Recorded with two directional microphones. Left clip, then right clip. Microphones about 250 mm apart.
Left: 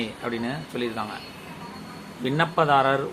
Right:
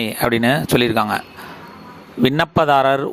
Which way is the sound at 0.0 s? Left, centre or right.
Right.